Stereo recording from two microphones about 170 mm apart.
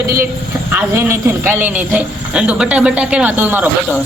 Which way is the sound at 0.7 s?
10° right (ahead or behind).